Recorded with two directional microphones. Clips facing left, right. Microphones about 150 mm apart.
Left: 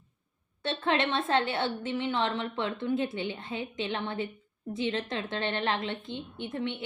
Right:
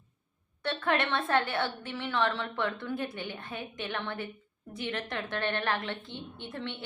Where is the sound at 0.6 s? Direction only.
25° left (ahead or behind).